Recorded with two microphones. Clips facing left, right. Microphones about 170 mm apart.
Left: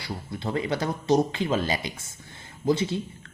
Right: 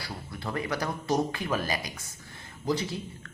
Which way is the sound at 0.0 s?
25° left (ahead or behind).